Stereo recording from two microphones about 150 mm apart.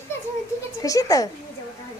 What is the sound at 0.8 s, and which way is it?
Speech, 20° left (ahead or behind).